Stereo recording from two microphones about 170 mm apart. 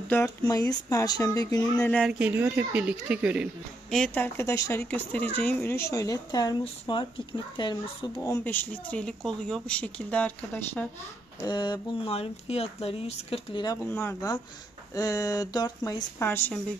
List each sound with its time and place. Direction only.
0.4 s speech: 20° left (ahead or behind)
1.8 s speech: 5° left (ahead or behind)
2.1 s speech: 10° right (ahead or behind)
3.9 s a woman's voice: 5° left (ahead or behind); by 7.7 s 30° left (ahead or behind)
8.3 s a woman's voice: 10° left (ahead or behind)
11.4 s speech: 25° left (ahead or behind)
13.8 s a woman's voice: 15° left (ahead or behind)